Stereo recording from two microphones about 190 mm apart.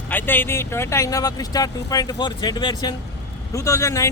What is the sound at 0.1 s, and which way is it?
A man's voice, 10° left (ahead or behind).